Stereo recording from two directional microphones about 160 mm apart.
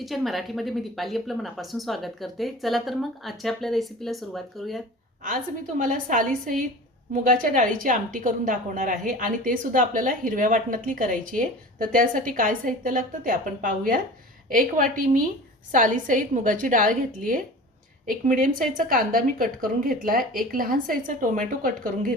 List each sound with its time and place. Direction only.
0.0 s speech: centre (ahead or behind)
5.8 s speech: 55° right (ahead or behind)